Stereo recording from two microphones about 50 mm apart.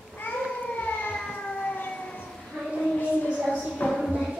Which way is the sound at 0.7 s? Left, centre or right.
Left.